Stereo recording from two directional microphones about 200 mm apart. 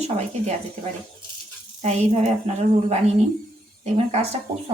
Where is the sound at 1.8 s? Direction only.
35° right (ahead or behind).